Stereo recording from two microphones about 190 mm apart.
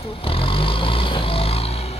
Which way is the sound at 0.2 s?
30° left (ahead or behind).